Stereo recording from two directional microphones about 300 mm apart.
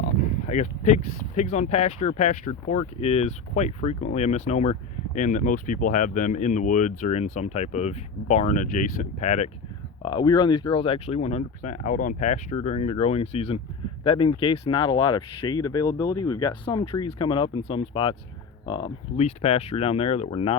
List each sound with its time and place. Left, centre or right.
0.2 s speech: left